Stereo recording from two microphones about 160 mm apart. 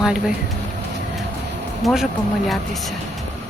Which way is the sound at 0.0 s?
5° right (ahead or behind).